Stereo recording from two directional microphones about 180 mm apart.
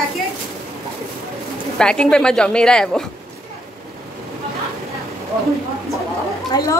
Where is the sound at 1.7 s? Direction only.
5° left (ahead or behind).